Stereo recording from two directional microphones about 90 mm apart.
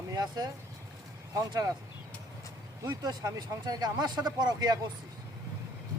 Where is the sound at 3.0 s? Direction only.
50° right (ahead or behind).